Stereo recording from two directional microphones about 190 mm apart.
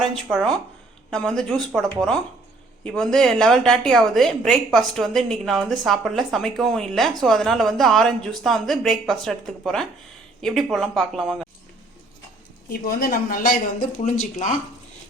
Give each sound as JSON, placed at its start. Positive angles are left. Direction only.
{"t": 1.1, "sound": "a woman's voice", "side_deg": 5}
{"t": 12.7, "sound": "speech", "side_deg": 50}